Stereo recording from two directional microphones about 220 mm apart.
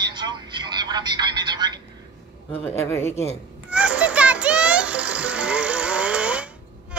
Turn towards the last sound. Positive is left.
turn(degrees=-5)  # may be behind; listen again after turning